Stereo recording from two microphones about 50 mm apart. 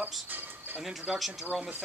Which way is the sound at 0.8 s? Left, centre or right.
Centre.